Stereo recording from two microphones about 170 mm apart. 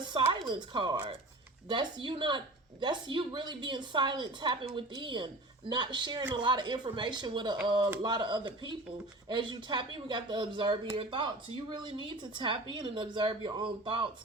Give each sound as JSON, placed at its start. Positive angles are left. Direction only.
{"t": 0.4, "sound": "a woman's voice", "side_deg": -25}